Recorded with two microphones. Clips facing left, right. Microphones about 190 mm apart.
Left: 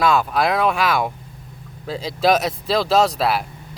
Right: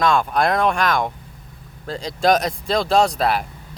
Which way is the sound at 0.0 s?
5° left (ahead or behind).